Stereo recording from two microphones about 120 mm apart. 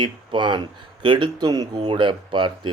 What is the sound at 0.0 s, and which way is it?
Speech, 40° right (ahead or behind).